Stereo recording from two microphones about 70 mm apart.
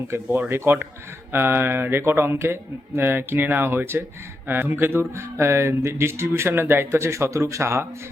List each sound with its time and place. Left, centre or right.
0.3 s speech: right